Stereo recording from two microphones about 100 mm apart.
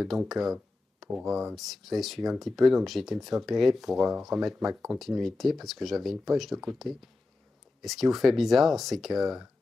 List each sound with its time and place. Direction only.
0.3 s speech: centre (ahead or behind)